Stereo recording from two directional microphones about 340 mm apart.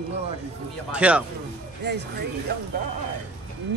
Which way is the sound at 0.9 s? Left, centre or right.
Centre.